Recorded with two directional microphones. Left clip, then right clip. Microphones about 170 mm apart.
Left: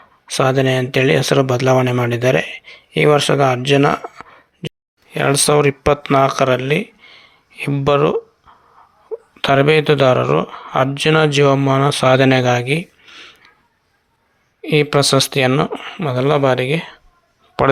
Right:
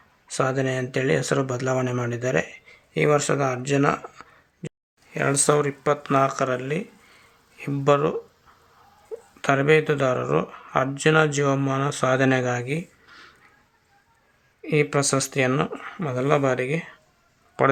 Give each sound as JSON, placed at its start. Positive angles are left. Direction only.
{"t": 0.3, "sound": "speech", "side_deg": 25}
{"t": 9.3, "sound": "speech", "side_deg": 25}
{"t": 13.1, "sound": "a sound", "side_deg": 15}
{"t": 14.6, "sound": "speech", "side_deg": 25}